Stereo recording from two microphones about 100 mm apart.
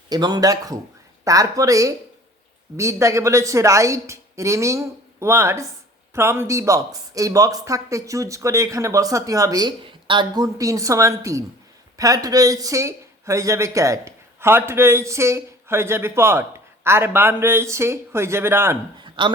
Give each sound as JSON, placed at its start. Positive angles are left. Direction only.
{"t": 0.1, "sound": "speech", "side_deg": -45}
{"t": 10.4, "sound": "speech", "side_deg": -35}
{"t": 19.0, "sound": "a sound", "side_deg": -55}